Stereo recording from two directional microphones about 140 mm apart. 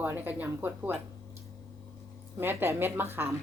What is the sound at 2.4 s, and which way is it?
Speech, 20° right (ahead or behind).